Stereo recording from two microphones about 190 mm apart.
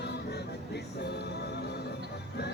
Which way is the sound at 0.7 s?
60° left (ahead or behind).